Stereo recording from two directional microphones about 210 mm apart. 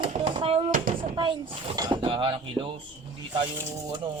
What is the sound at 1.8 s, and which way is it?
Speech, 20° right (ahead or behind).